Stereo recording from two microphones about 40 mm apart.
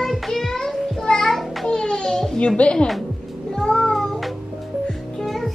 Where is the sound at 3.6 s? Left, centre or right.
Left.